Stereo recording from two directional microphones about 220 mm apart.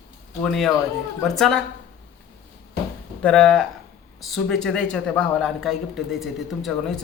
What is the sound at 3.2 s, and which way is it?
Speech, 5° left (ahead or behind).